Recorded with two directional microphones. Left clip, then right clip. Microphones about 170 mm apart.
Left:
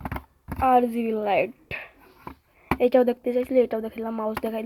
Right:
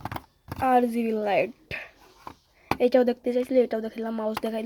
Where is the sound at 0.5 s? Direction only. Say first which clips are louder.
Left 2 dB; 10° right (ahead or behind).